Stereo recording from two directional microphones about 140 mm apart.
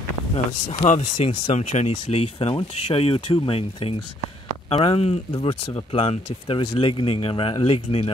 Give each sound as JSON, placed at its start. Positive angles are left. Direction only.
{"t": 0.8, "sound": "speech", "side_deg": 55}